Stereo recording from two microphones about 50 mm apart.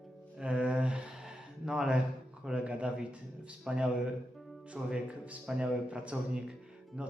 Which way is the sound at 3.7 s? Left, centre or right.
Centre.